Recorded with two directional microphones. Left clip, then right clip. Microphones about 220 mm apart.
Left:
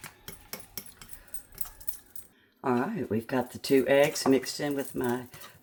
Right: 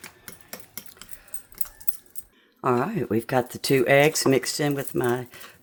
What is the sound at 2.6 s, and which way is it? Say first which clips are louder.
Cutlery: right 6 dB; 35° right (ahead or behind).